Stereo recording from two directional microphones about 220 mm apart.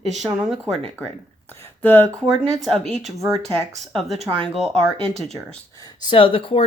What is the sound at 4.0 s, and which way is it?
Speech, 30° right (ahead or behind).